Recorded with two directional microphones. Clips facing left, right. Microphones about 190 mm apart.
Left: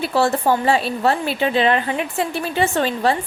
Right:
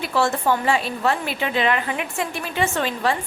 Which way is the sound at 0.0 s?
30° left (ahead or behind).